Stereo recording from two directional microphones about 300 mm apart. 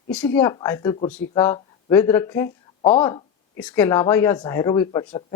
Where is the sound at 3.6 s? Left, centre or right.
Centre.